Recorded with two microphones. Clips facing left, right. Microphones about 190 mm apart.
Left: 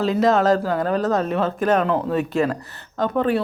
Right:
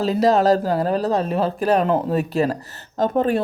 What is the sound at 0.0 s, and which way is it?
Speech, 35° right (ahead or behind).